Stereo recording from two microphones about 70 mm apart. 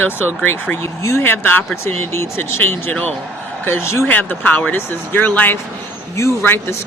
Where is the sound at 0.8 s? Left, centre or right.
Left.